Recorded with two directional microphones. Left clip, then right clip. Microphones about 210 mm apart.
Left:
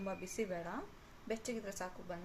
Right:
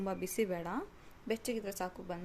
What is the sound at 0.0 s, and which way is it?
Speech, 45° right (ahead or behind).